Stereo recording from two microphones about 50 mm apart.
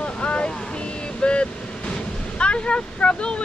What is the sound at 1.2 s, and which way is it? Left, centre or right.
Waves, left.